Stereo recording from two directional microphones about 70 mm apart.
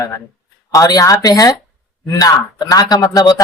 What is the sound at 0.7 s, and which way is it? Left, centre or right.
Speech, left.